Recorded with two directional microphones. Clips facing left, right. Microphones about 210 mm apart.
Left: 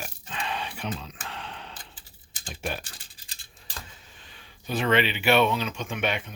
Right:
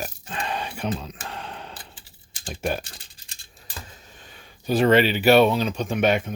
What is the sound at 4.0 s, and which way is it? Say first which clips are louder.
Speech: right 4 dB; 45° right (ahead or behind).